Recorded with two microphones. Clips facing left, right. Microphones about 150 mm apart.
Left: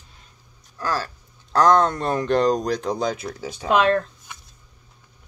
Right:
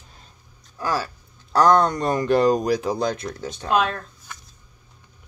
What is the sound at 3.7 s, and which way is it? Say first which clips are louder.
Speech: left 3 dB; 90° left.